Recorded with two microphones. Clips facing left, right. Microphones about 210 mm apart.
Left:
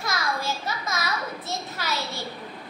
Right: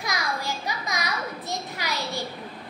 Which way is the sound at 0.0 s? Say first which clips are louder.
Left 1 dB; 15° right (ahead or behind).